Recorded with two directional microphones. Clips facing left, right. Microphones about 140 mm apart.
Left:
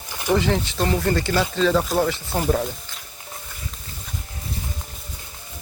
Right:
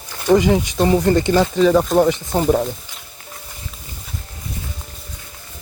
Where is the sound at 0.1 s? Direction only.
15° left (ahead or behind).